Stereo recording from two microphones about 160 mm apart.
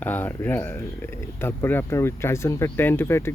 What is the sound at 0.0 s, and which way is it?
Speech, 10° left (ahead or behind).